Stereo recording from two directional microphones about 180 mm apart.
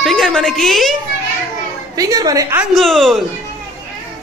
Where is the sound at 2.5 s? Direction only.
Centre (ahead or behind).